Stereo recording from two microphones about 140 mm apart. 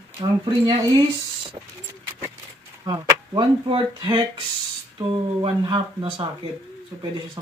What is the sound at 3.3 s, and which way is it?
Speech, 35° right (ahead or behind).